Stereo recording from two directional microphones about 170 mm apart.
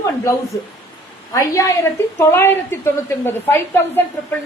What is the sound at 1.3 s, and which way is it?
A woman's voice, 20° left (ahead or behind).